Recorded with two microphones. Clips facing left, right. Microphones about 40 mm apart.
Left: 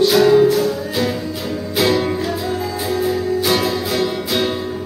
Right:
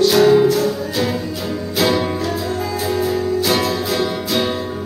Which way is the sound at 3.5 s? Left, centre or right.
Centre.